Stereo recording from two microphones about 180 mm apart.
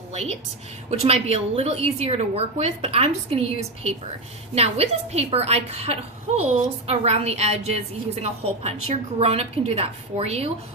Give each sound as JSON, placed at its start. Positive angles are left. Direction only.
{"t": 0.9, "sound": "a woman's voice", "side_deg": -35}
{"t": 4.5, "sound": "a woman's voice", "side_deg": -35}